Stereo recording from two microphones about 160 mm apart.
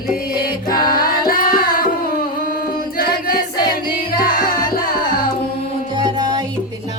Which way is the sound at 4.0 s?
65° left (ahead or behind).